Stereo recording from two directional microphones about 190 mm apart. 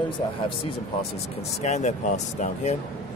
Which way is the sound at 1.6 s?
35° left (ahead or behind).